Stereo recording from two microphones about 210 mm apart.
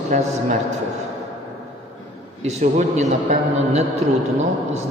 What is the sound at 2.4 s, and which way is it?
A man's voice, 30° right (ahead or behind).